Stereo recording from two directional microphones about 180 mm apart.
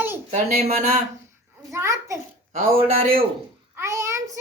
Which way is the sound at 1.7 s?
15° right (ahead or behind).